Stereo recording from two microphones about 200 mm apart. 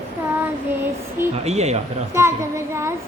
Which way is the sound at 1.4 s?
35° right (ahead or behind).